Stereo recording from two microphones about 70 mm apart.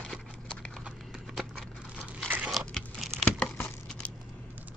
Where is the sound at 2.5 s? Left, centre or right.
Centre.